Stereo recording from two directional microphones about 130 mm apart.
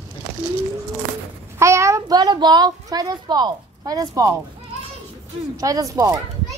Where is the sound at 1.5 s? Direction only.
20° right (ahead or behind).